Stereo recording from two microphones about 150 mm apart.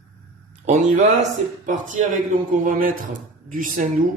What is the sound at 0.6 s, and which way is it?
A man's voice, 55° right (ahead or behind).